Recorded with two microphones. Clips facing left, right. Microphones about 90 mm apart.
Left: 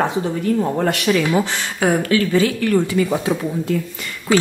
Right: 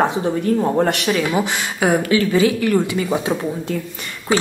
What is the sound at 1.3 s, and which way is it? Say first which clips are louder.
Speech: left 1 dB; 15° right (ahead or behind).